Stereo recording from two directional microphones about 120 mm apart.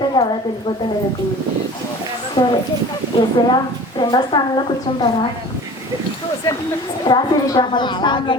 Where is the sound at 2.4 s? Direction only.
45° left (ahead or behind).